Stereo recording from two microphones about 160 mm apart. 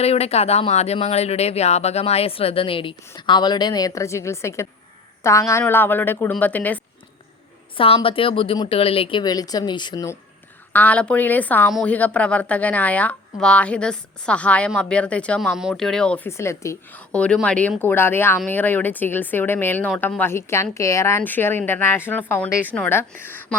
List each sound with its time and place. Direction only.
0.0 s a woman's voice: 40° left (ahead or behind); by 6.8 s 10° left (ahead or behind)
7.8 s speech: 35° left (ahead or behind)
10.7 s speech: 10° left (ahead or behind)